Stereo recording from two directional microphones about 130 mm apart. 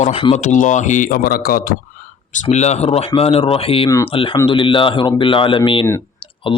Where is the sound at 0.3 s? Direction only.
70° left (ahead or behind); by 1.7 s 90° left.